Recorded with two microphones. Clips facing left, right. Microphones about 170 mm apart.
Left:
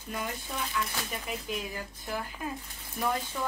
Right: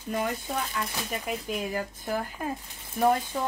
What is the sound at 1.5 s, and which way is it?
A woman's voice, 45° right (ahead or behind).